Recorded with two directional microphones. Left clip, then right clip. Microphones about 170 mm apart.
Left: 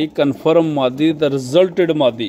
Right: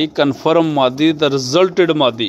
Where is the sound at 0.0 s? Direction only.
15° left (ahead or behind).